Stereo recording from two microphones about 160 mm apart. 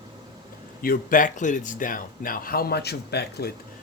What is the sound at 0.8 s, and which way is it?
A man's voice, 60° left (ahead or behind).